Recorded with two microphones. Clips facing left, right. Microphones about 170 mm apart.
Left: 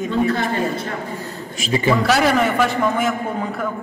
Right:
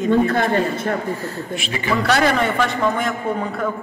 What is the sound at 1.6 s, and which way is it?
Speech, 30° left (ahead or behind).